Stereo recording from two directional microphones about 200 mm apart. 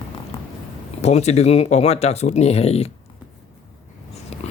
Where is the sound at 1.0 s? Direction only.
35° left (ahead or behind).